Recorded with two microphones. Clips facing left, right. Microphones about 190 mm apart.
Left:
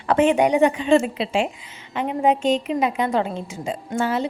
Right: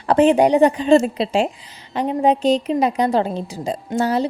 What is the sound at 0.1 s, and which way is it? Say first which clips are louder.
A woman's voice: right 3 dB; 35° right (ahead or behind).